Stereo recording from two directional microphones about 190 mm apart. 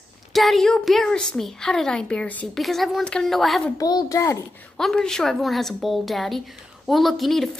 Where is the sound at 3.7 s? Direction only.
20° left (ahead or behind).